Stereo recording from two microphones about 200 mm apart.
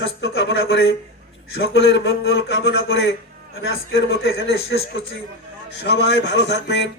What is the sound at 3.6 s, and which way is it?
Speech, 80° left.